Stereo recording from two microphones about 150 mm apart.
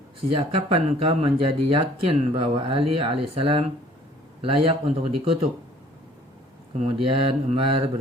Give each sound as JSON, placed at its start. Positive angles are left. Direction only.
{"t": 0.2, "sound": "speech", "side_deg": -40}
{"t": 6.7, "sound": "speech", "side_deg": -40}